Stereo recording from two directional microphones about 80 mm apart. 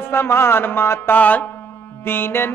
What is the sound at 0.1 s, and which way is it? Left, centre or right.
A man's voice, left.